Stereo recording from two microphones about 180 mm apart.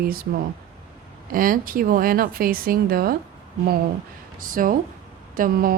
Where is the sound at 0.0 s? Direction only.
55° right (ahead or behind).